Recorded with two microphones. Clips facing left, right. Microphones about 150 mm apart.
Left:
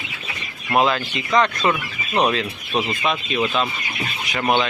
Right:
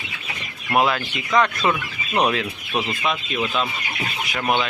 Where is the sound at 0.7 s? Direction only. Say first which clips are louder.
Left 1 dB; 10° right (ahead or behind).